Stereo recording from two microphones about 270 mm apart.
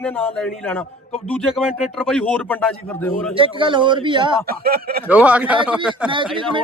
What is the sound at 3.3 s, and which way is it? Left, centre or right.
A man's voice, centre.